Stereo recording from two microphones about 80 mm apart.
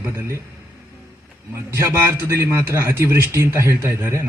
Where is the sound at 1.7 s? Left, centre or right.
Right.